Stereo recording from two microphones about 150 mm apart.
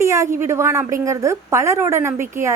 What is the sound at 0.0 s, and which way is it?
A woman's voice, 20° right (ahead or behind).